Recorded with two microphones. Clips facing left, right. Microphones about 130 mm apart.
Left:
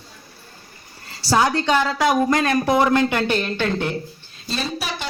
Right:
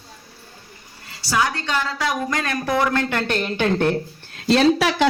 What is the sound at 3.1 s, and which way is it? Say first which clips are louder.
Speech: left 2 dB; centre (ahead or behind).